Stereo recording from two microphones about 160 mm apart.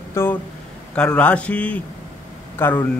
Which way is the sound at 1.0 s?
5° left (ahead or behind).